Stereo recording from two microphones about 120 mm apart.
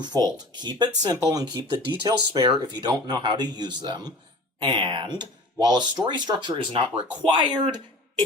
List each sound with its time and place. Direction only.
0.0 s speech: 35° right (ahead or behind)